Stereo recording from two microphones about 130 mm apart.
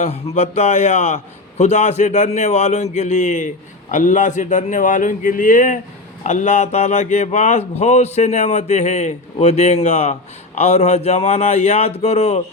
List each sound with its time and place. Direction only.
0.3 s a man's voice: 60° left (ahead or behind); by 5.8 s 90° left
6.2 s speech: 70° left (ahead or behind)